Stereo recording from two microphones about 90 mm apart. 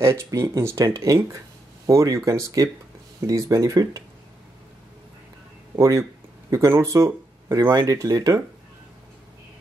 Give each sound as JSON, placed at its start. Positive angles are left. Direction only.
{"t": 0.0, "sound": "speech", "side_deg": -30}
{"t": 5.8, "sound": "speech", "side_deg": -35}
{"t": 7.7, "sound": "speech", "side_deg": -40}